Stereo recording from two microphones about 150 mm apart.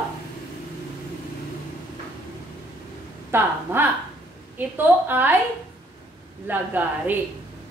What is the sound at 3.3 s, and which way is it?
A woman's voice, 15° right (ahead or behind).